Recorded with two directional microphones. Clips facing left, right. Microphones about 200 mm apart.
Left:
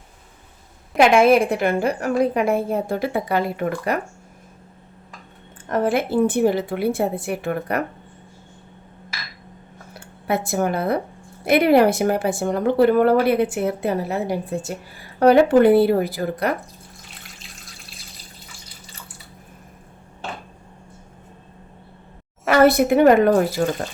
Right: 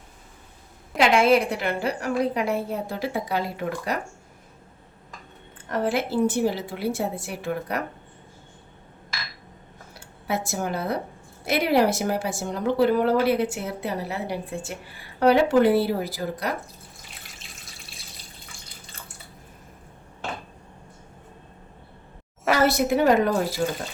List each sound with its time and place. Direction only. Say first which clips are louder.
0.9 s a woman's voice: left 5 dB; 50° left (ahead or behind)
5.6 s a woman's voice: left 4 dB; 55° left (ahead or behind)
9.9 s a woman's voice: left 5 dB; 55° left (ahead or behind); by 14.8 s 40° left (ahead or behind)
15.2 s a woman's voice: left 5 dB; 50° left (ahead or behind)
17.7 s water tap: left 2 dB; centre (ahead or behind)
22.5 s a woman's voice: left 7 dB; 55° left (ahead or behind)